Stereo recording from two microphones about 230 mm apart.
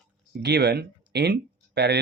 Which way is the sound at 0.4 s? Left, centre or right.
Right.